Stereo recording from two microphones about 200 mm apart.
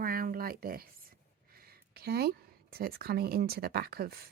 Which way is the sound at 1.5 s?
50° right (ahead or behind).